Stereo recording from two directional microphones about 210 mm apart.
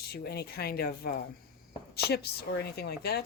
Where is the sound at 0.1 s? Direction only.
50° left (ahead or behind).